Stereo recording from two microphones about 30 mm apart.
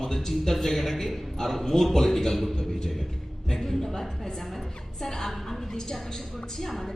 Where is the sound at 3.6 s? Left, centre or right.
Centre.